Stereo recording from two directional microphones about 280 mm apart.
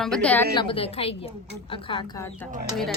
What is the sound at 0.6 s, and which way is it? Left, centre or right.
A woman's voice, centre.